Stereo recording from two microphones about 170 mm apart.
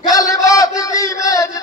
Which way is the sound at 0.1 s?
20° left (ahead or behind).